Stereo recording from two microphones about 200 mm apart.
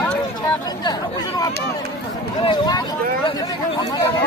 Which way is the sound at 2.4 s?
20° left (ahead or behind).